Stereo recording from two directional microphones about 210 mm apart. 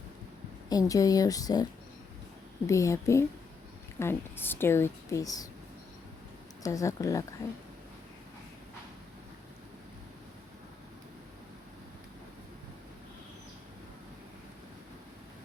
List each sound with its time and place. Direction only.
0.7 s a woman's voice: 15° left (ahead or behind)
2.6 s a woman's voice: 15° left (ahead or behind)
6.6 s a woman's voice: 15° left (ahead or behind)